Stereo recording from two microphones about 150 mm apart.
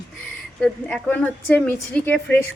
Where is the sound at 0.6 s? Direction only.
5° left (ahead or behind).